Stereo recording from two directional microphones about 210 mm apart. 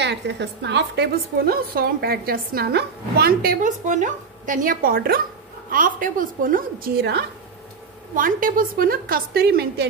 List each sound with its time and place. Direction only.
0.0 s a woman's voice: 55° right (ahead or behind)
8.1 s a woman's voice: 40° right (ahead or behind)